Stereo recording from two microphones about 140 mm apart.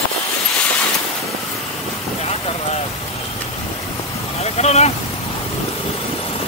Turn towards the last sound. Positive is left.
turn(degrees=50)  # may be behind; listen again after turning